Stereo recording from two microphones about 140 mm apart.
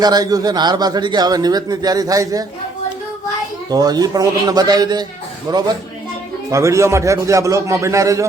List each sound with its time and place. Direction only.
0.0 s a man's voice: 30° right (ahead or behind)
3.7 s a man's voice: 25° right (ahead or behind)